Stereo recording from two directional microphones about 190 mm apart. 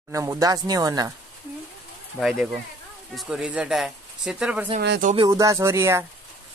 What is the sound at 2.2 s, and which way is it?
Speech, centre (ahead or behind).